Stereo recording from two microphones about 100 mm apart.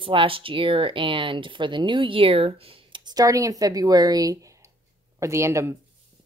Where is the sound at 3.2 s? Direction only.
35° right (ahead or behind).